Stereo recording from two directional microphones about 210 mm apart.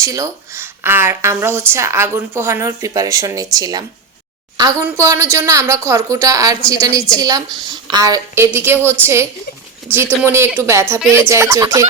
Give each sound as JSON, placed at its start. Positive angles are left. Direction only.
{"t": 0.0, "sound": "a woman's voice", "side_deg": -15}
{"t": 10.2, "sound": "speech", "side_deg": -10}